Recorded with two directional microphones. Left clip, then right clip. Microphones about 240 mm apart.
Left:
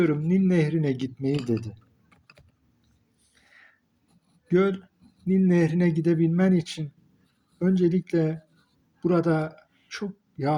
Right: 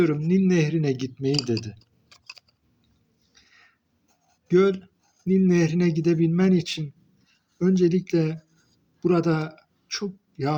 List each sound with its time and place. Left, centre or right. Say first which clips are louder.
0.0 s speech: right 2 dB; right
4.4 s speech: right 3 dB; centre